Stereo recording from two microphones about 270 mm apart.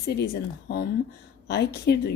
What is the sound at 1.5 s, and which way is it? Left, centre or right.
Speech, left.